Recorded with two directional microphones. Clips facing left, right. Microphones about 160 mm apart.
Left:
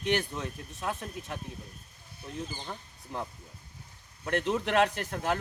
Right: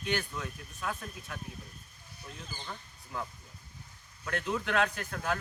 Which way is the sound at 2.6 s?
30° left (ahead or behind).